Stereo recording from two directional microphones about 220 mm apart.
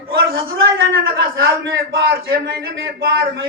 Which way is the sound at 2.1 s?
45° right (ahead or behind).